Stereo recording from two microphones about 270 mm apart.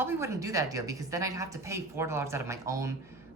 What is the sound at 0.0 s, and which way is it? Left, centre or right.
A woman's voice, centre.